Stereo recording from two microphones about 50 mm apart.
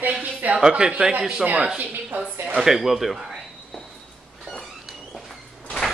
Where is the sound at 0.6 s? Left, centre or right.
Centre.